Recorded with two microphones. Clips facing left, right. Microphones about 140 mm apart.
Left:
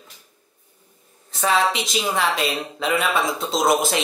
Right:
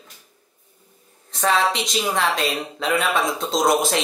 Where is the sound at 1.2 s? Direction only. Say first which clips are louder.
Even; centre (ahead or behind).